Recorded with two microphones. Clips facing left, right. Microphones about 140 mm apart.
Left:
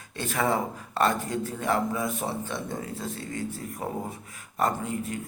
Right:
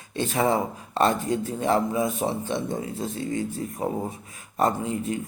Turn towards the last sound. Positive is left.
turn(degrees=-20)  # may be behind; listen again after turning